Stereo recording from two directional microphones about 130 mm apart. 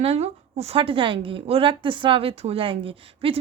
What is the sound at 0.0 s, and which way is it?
Speech, 55° right (ahead or behind).